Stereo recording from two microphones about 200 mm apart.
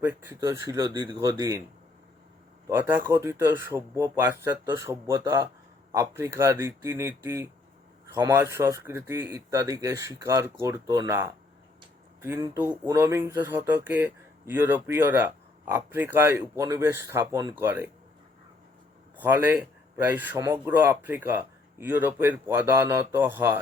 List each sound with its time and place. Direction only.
0.0 s speech: 10° right (ahead or behind)
2.6 s speech: 10° right (ahead or behind)
19.1 s a man's voice: 10° right (ahead or behind)